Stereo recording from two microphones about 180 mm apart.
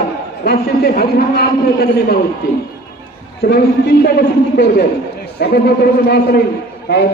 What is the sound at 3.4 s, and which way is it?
A man's voice, 60° left (ahead or behind).